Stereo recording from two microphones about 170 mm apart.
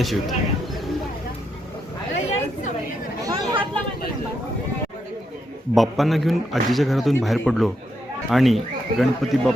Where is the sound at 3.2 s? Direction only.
20° right (ahead or behind).